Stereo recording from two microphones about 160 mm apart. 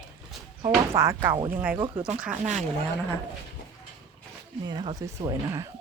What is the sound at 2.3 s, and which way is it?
Speech, 45° right (ahead or behind).